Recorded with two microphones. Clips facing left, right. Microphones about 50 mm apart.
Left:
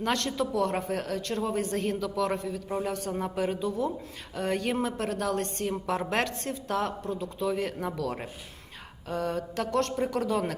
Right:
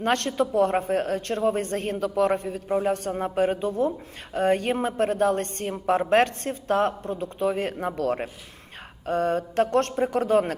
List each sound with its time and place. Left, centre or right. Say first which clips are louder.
0.0 s a man's voice: right 5 dB; right
3.1 s a man's voice: right 6 dB; right